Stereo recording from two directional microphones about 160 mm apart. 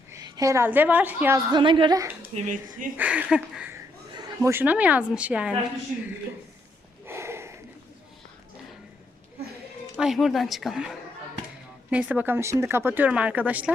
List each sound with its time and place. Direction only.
0.1 s a woman's voice: 20° right (ahead or behind)
1.5 s speech: 30° right (ahead or behind)
2.3 s speech: 55° right (ahead or behind)
3.0 s speech: 10° right (ahead or behind)
7.1 s a sound: 15° right (ahead or behind)
10.0 s speech: centre (ahead or behind)